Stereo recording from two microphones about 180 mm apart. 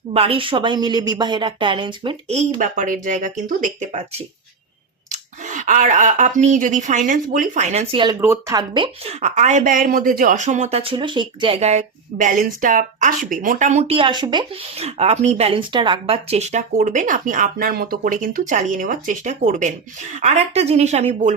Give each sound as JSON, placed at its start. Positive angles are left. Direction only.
{"t": 0.1, "sound": "a woman's voice", "side_deg": -30}
{"t": 2.6, "sound": "speech", "side_deg": -45}
{"t": 5.1, "sound": "speech", "side_deg": -45}
{"t": 8.2, "sound": "speech", "side_deg": -15}